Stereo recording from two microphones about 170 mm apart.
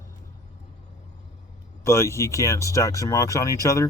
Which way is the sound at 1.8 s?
15° left (ahead or behind).